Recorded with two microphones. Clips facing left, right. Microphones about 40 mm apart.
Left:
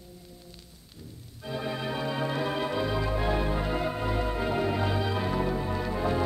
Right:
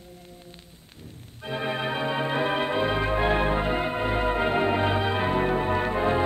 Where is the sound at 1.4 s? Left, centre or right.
Right.